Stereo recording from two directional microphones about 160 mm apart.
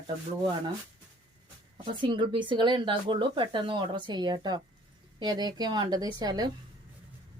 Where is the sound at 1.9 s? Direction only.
30° right (ahead or behind).